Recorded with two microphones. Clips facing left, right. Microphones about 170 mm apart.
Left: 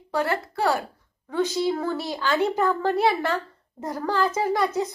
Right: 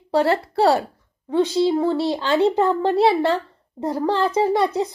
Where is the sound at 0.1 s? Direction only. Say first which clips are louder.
Right 7 dB; 30° right (ahead or behind).